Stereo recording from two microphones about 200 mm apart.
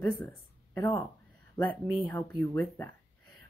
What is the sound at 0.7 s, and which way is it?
Speech, 15° left (ahead or behind).